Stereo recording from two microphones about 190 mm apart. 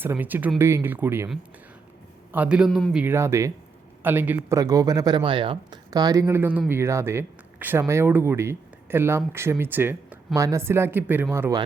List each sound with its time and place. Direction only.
0.0 s speech: 10° right (ahead or behind)